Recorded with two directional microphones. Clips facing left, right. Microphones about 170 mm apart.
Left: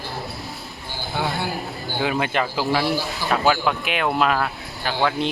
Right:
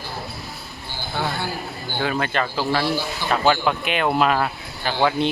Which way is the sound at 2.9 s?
20° right (ahead or behind).